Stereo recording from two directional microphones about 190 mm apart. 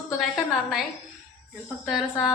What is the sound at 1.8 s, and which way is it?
Speech, centre (ahead or behind).